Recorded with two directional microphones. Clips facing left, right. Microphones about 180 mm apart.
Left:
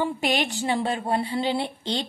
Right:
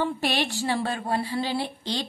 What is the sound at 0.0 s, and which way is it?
Speech, 15° left (ahead or behind).